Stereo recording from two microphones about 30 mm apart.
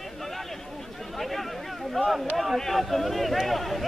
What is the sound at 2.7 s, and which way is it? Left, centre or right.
Speech, centre.